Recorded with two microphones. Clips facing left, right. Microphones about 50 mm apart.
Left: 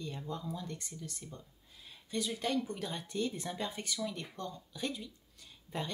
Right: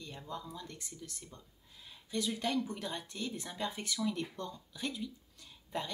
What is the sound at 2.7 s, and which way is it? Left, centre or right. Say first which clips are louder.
Speech: left 3 dB; centre.